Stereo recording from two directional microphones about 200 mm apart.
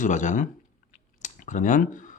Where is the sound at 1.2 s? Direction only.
40° left (ahead or behind).